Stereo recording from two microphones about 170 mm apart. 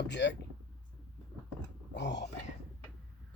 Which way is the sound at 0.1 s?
90° left.